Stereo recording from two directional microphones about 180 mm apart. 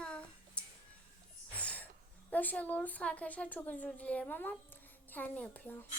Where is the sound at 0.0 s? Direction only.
5° left (ahead or behind).